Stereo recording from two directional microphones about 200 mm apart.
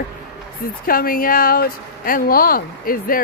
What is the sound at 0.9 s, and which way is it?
Speech, 45° left (ahead or behind).